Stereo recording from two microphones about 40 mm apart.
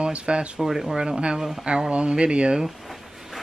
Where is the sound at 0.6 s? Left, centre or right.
Centre.